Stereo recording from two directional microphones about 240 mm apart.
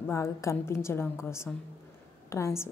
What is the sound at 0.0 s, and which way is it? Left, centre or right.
A woman's voice, centre.